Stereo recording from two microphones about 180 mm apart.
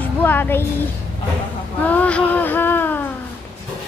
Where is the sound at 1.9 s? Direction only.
10° left (ahead or behind).